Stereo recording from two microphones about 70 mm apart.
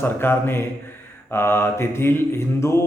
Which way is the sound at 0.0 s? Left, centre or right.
Left.